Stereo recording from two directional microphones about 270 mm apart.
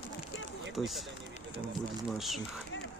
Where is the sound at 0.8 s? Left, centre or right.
Centre.